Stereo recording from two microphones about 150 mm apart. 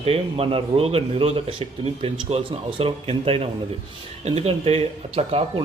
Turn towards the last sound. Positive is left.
turn(degrees=-40)  # may be behind; listen again after turning